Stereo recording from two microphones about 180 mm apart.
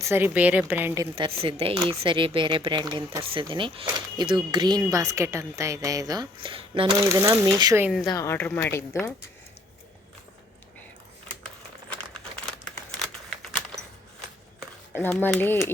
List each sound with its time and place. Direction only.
0.0 s a woman's voice: 10° right (ahead or behind)
1.1 s speech: 30° right (ahead or behind)
7.0 s speech: 15° right (ahead or behind)
7.9 s speech: centre (ahead or behind)
8.1 s speech: 15° left (ahead or behind)
15.0 s speech: 5° left (ahead or behind)